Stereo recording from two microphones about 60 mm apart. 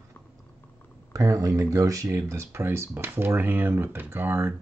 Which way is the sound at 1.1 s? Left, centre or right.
Right.